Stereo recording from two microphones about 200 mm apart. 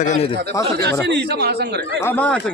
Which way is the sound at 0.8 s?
60° right (ahead or behind).